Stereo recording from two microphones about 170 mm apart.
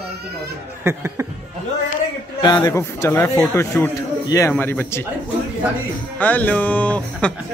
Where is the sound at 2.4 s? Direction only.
25° left (ahead or behind).